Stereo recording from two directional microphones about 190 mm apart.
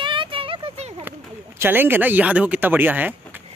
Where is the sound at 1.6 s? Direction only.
10° right (ahead or behind).